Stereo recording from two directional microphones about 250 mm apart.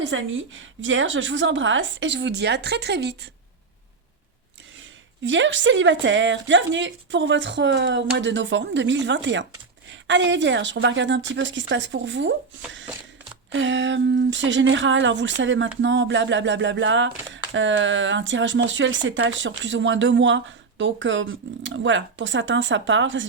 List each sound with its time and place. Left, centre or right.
0.0 s speech: right
5.2 s speech: right
13.5 s speech: right